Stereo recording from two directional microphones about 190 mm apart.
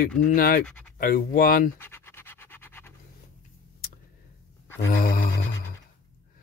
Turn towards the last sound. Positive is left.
turn(degrees=50)  # may be behind; listen again after turning